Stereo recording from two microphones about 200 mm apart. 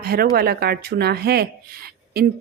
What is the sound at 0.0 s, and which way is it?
A woman's voice, 50° right (ahead or behind).